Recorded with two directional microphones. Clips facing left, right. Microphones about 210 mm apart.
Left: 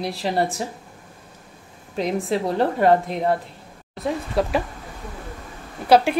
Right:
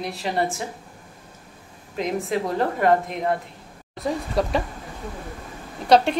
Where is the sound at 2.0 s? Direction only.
30° left (ahead or behind).